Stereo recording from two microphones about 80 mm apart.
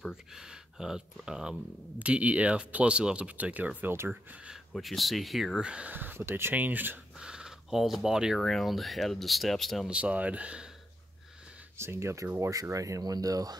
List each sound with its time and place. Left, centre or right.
0.1 s speech: centre
4.7 s speech: centre
5.6 s speech: centre
7.2 s speech: centre
9.8 s speech: centre
11.7 s speech: right